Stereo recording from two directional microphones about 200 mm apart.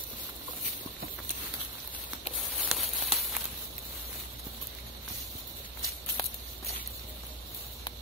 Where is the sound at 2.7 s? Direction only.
Centre (ahead or behind).